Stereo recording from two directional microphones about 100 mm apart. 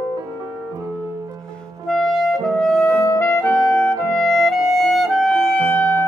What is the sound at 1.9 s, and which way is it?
Clarinet, centre (ahead or behind).